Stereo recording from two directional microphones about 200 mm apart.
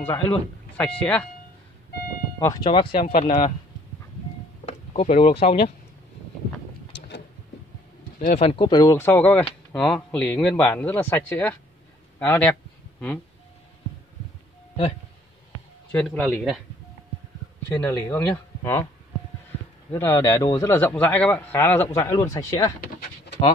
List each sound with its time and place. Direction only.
0.0 s a man's voice: 15° left (ahead or behind)
2.4 s speech: 20° left (ahead or behind)
4.6 s speech: 35° left (ahead or behind)
8.2 s speech: 40° left (ahead or behind)
8.5 s a man's voice: 25° left (ahead or behind); by 12.5 s 5° left (ahead or behind)
15.9 s speech: 5° left (ahead or behind)
17.7 s a man's voice: 10° left (ahead or behind)
19.9 s a man's voice: 15° left (ahead or behind)